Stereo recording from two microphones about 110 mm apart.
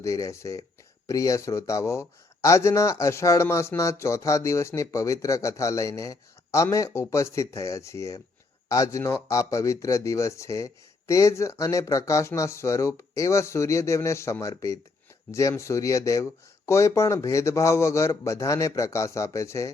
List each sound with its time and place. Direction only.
0.0 s a man's voice: 30° left (ahead or behind)